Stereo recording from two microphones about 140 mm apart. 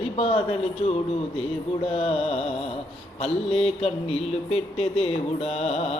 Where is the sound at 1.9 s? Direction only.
45° left (ahead or behind).